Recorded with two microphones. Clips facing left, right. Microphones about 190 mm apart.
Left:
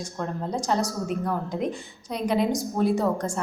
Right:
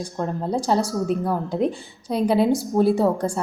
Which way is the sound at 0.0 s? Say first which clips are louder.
Right 4 dB; 30° right (ahead or behind).